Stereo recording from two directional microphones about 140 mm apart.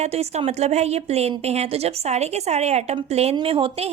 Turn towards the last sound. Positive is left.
turn(degrees=-40)  # may be behind; listen again after turning